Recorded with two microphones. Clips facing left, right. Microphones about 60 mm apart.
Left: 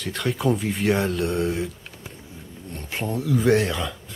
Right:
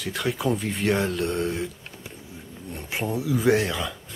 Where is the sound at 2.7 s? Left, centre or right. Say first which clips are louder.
Even; centre.